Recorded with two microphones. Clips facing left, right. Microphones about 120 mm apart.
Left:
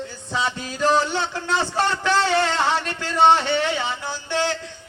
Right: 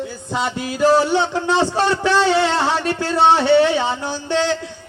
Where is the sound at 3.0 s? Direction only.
35° right (ahead or behind).